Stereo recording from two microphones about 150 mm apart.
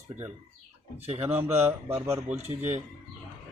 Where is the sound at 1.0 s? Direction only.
45° right (ahead or behind).